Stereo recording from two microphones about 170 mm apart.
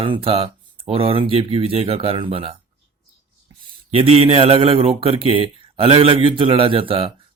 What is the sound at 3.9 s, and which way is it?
Speech, 35° right (ahead or behind).